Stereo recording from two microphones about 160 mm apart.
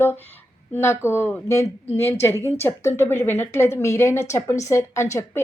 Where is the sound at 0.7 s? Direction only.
15° left (ahead or behind).